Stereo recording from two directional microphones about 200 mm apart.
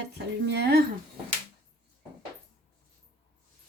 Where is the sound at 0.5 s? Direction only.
55° right (ahead or behind).